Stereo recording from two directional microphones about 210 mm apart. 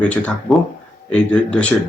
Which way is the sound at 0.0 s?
5° left (ahead or behind).